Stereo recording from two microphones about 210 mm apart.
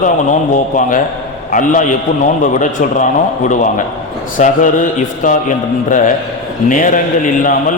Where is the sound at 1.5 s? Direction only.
40° left (ahead or behind).